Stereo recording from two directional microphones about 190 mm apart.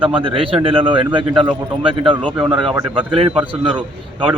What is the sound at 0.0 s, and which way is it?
A man's voice, 25° right (ahead or behind).